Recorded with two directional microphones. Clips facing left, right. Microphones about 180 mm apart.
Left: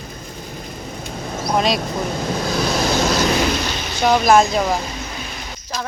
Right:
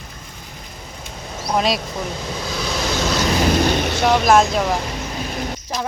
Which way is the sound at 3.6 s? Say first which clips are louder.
Right 7 dB; 60° right (ahead or behind).